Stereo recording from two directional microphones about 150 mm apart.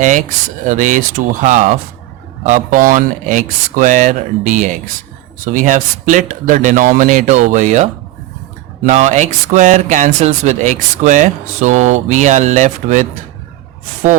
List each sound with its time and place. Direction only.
0.6 s speech: 55° right (ahead or behind)
8.9 s speech: 50° right (ahead or behind)